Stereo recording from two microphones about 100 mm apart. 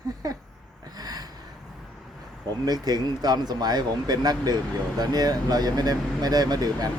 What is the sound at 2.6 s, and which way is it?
Speech, 40° right (ahead or behind).